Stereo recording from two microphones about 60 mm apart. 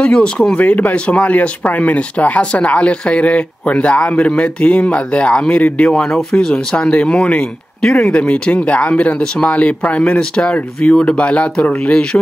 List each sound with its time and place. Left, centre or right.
0.0 s speech: centre
5.9 s speech: centre
6.5 s speech: centre